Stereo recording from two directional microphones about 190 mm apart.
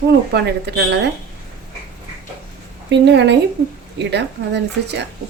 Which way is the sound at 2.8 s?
65° right (ahead or behind).